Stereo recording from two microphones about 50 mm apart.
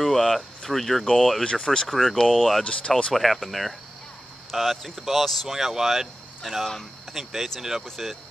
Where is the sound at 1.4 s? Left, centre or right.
Centre.